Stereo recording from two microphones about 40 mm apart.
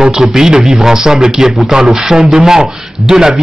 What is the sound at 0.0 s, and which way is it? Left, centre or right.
Speech, centre.